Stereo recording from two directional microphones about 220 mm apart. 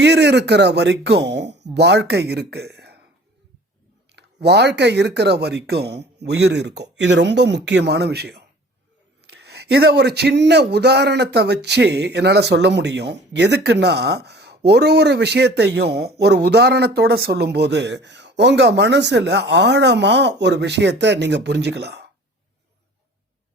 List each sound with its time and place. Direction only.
0.0 s speech: 50° right (ahead or behind)
4.1 s speech: 50° right (ahead or behind)